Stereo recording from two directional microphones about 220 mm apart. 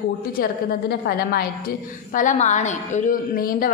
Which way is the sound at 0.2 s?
40° left (ahead or behind).